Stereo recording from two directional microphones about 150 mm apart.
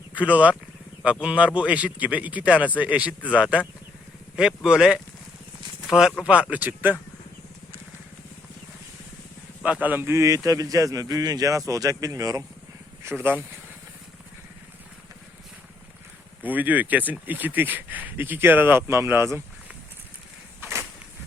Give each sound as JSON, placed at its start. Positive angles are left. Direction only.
{"t": 0.1, "sound": "speech", "side_deg": -10}
{"t": 9.6, "sound": "a man's voice", "side_deg": -10}
{"t": 16.4, "sound": "speech", "side_deg": -10}
{"t": 20.6, "sound": "a sound", "side_deg": -15}